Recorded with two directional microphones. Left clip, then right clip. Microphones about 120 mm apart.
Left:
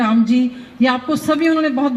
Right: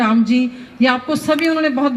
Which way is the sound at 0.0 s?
20° right (ahead or behind).